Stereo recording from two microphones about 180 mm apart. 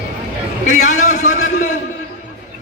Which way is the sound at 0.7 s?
45° left (ahead or behind).